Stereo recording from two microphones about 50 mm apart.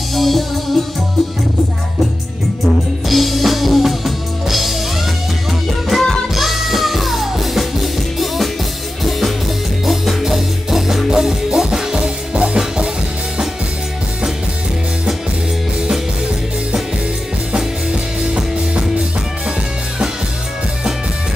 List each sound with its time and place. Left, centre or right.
0.1 s music: centre
3.1 s music: centre
9.8 s music: centre
17.6 s music: centre